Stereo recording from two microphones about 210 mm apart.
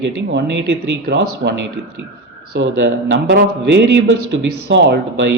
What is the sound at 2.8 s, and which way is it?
A man's voice, 55° right (ahead or behind).